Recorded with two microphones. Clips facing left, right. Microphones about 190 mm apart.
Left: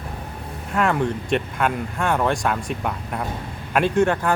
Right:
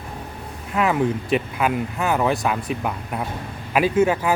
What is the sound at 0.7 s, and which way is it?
Speech, 5° right (ahead or behind).